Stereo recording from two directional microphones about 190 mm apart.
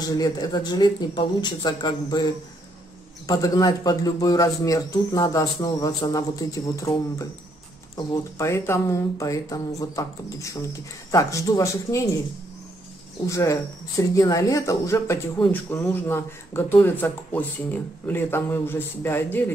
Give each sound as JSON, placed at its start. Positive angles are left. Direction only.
{"t": 0.0, "sound": "a man's voice", "side_deg": 20}
{"t": 13.3, "sound": "speech", "side_deg": 15}